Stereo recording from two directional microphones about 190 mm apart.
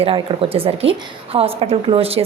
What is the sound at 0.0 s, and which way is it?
A woman's voice, 30° right (ahead or behind).